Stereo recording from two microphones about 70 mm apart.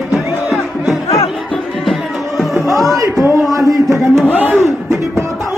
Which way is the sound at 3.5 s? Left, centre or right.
Right.